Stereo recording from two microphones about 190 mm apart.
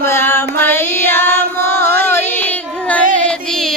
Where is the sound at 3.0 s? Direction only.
40° right (ahead or behind).